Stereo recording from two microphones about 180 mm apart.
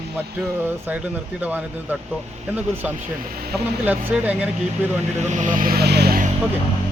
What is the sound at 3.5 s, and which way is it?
Speech, 5° right (ahead or behind).